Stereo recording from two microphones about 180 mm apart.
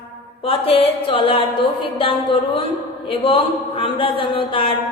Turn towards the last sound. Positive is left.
turn(degrees=30)  # may be behind; listen again after turning